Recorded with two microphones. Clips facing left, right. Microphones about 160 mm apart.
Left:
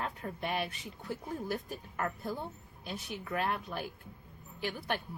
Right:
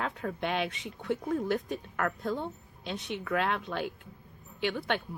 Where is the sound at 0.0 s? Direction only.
85° right.